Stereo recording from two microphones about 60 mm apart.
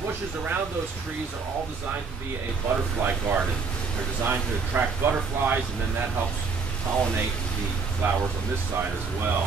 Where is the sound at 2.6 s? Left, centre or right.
Right.